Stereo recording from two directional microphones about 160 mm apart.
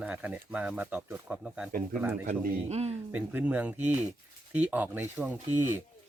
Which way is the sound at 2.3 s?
40° right (ahead or behind).